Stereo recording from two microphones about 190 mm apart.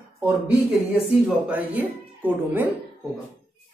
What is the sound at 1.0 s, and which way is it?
A man's voice, 5° right (ahead or behind).